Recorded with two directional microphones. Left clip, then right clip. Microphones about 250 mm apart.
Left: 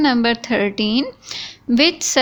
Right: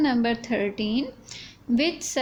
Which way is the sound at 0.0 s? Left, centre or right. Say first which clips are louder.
Left 7 dB; centre.